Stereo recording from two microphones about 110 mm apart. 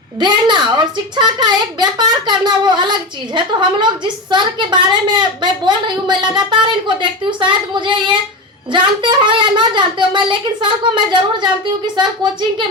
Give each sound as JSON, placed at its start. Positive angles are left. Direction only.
{"t": 0.2, "sound": "a woman's voice", "side_deg": -45}